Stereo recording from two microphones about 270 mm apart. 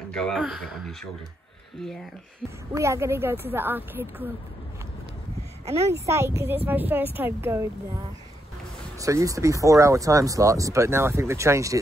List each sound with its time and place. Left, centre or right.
0.1 s speech: centre
2.7 s speech: centre
6.0 s speech: centre
8.9 s speech: centre